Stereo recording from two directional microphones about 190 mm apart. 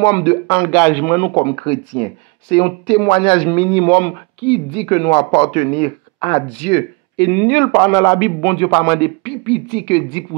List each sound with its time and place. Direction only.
0.0 s speech: 25° left (ahead or behind)
1.3 s speech: 25° left (ahead or behind)
7.2 s speech: 15° left (ahead or behind)